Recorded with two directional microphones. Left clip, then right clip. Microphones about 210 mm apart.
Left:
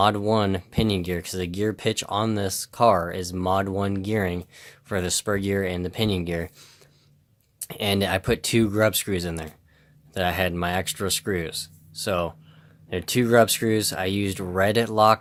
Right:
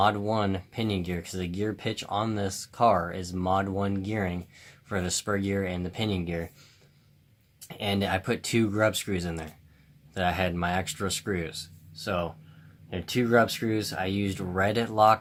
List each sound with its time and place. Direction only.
0.0 s speech: 45° left (ahead or behind)
7.7 s speech: 50° left (ahead or behind)